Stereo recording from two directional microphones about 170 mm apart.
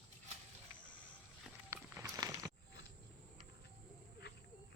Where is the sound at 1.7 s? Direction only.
15° right (ahead or behind).